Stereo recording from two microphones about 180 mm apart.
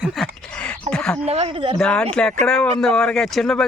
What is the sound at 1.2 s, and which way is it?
Speech, 35° right (ahead or behind).